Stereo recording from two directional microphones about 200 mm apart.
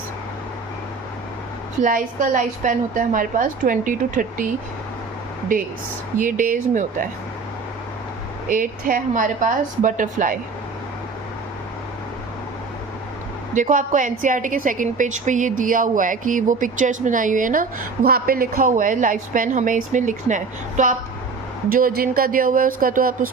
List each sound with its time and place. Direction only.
1.8 s a woman's voice: 40° right (ahead or behind)
5.5 s speech: 45° right (ahead or behind)
8.4 s a woman's voice: 45° right (ahead or behind)
13.5 s a woman's voice: 40° right (ahead or behind)